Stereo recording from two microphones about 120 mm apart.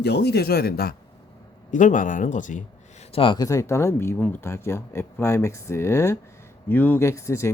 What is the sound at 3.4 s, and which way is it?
Speech, 25° left (ahead or behind).